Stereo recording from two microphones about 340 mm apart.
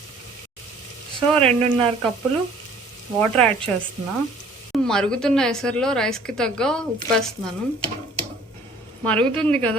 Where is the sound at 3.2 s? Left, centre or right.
Centre.